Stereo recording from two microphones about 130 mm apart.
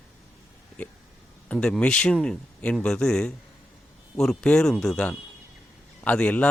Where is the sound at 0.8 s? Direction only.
10° left (ahead or behind).